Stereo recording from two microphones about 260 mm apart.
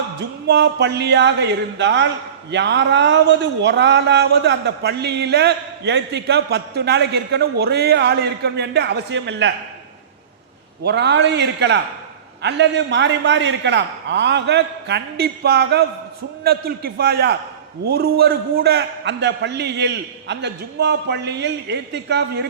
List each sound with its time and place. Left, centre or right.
0.2 s speech: right
10.8 s speech: right